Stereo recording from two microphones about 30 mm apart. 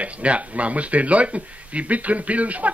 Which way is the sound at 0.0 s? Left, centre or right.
Right.